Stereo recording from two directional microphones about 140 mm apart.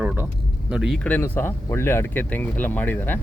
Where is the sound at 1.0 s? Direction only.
10° left (ahead or behind).